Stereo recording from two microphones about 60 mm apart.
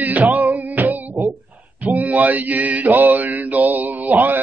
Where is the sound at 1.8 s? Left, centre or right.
Right.